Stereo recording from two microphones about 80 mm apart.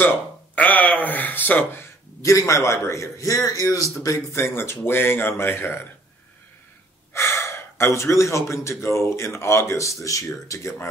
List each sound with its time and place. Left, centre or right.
0.6 s speech: left
7.2 s speech: left